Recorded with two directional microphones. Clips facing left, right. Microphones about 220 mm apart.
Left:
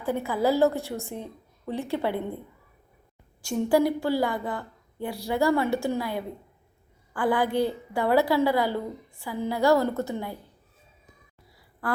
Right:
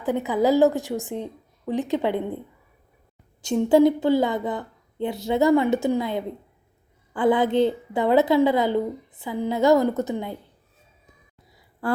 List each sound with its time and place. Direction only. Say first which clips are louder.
0.0 s a woman's voice: right 4 dB; 20° right (ahead or behind)
3.4 s a woman's voice: right 6 dB; 20° right (ahead or behind)
11.8 s speech: right 5 dB; 30° right (ahead or behind)